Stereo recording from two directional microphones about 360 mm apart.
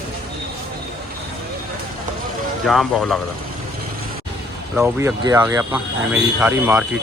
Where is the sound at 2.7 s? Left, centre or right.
Centre.